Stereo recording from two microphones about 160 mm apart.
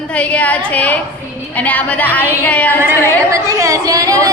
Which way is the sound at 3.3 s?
20° right (ahead or behind).